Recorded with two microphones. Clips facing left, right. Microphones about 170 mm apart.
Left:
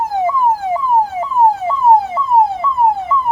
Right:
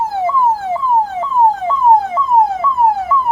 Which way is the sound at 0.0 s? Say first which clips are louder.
Even; 15° left (ahead or behind).